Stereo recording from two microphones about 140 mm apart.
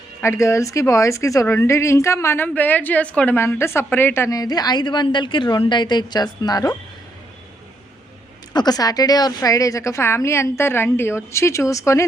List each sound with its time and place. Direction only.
0.2 s a woman's voice: 20° left (ahead or behind)
8.5 s a woman's voice: 30° left (ahead or behind)